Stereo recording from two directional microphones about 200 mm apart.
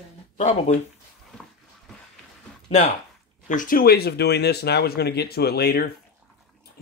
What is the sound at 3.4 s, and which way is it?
Speech, 40° left (ahead or behind).